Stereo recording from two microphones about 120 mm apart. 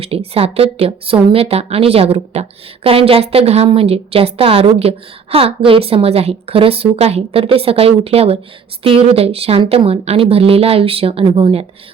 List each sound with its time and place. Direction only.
0.0 s speech: 55° right (ahead or behind)